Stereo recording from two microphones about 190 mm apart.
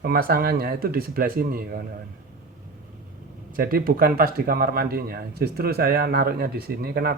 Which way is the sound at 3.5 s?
50° right (ahead or behind).